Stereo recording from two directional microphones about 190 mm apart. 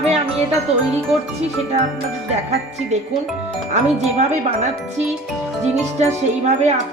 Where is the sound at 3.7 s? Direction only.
35° right (ahead or behind).